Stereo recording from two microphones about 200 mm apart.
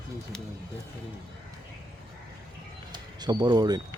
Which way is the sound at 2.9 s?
20° right (ahead or behind).